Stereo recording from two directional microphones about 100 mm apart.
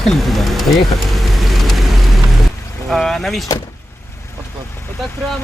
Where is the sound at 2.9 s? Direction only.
5° left (ahead or behind).